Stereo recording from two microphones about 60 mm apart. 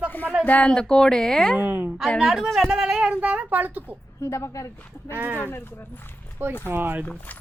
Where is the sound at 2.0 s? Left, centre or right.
Centre.